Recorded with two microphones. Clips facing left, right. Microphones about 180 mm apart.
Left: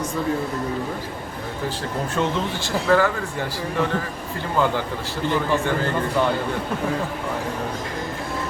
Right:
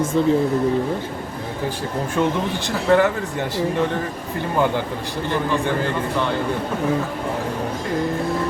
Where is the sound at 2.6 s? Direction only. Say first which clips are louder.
Right 2 dB; 20° right (ahead or behind).